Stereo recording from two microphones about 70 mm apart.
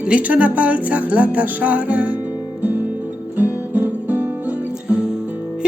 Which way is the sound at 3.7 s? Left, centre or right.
Right.